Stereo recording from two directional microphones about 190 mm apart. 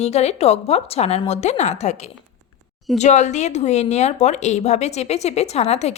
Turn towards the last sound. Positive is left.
turn(degrees=35)  # may be behind; listen again after turning